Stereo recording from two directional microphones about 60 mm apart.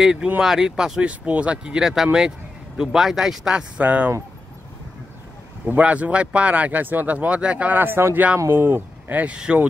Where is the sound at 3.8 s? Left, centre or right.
Right.